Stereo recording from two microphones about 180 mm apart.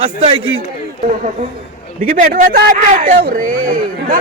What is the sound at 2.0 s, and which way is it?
A man's voice, 50° right (ahead or behind).